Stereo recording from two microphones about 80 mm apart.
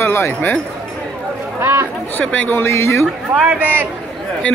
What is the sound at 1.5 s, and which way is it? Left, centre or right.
Speech, right.